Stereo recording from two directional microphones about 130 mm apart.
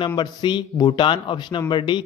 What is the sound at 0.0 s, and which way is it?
Speech, 35° left (ahead or behind).